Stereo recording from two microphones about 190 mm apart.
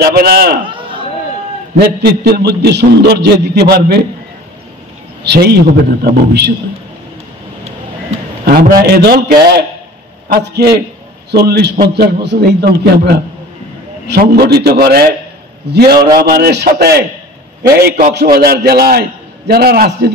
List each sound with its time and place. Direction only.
0.0 s a man's voice: 55° right (ahead or behind)
0.7 s chatter: 25° right (ahead or behind)
1.8 s a man's voice: 60° right (ahead or behind)
5.2 s a man's voice: 60° right (ahead or behind)
8.5 s a man's voice: 50° right (ahead or behind)